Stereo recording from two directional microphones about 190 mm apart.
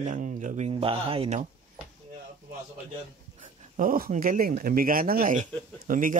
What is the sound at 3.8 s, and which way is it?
A man's voice, 45° right (ahead or behind).